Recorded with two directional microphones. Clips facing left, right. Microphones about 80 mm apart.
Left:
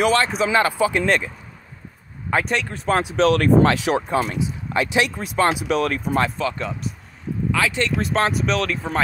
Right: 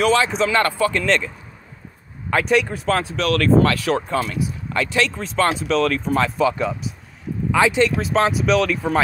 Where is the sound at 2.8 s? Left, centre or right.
Centre.